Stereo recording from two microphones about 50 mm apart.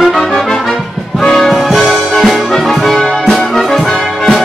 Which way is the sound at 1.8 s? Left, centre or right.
Centre.